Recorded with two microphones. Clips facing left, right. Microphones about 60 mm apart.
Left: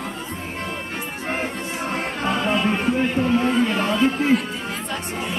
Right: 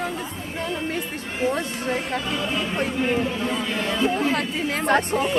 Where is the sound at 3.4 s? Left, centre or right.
Left.